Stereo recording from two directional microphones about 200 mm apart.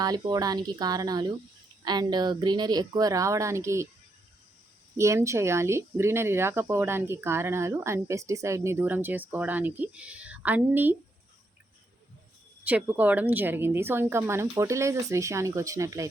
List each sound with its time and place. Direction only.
0.0 s speech: 20° right (ahead or behind)
4.9 s speech: 15° right (ahead or behind)
12.6 s speech: 10° right (ahead or behind)